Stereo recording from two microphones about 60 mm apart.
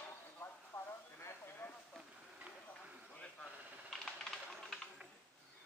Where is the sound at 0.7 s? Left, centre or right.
Left.